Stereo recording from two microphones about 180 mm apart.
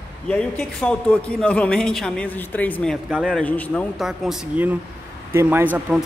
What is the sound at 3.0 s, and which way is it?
Speech, 5° right (ahead or behind).